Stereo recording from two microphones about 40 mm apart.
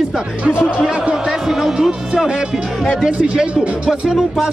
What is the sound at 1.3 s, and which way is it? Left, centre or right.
Speech, centre.